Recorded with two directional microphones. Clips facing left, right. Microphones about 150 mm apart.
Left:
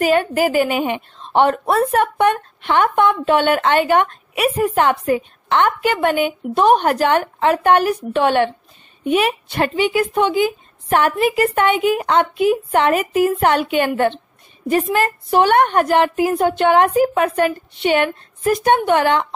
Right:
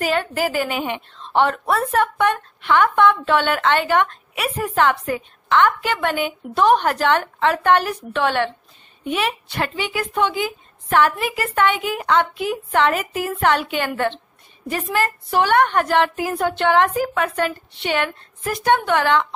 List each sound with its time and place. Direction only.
0.0 s a woman's voice: 15° left (ahead or behind)